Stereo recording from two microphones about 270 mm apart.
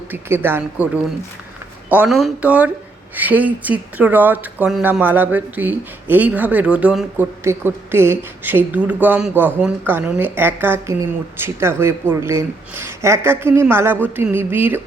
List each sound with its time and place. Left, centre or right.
0.1 s speech: centre
1.9 s speech: centre